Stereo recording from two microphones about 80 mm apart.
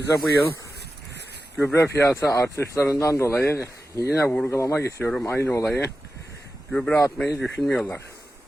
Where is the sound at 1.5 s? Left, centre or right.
Left.